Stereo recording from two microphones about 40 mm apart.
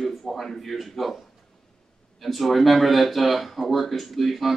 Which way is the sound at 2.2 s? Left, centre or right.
Centre.